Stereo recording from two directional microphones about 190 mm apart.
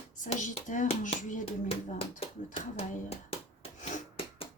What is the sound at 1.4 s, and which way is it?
Speech, 30° left (ahead or behind).